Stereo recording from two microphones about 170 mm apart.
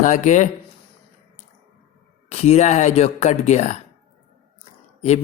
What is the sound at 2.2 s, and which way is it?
A man's voice, 40° left (ahead or behind).